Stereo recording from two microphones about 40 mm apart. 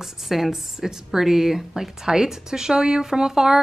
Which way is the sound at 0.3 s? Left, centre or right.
Centre.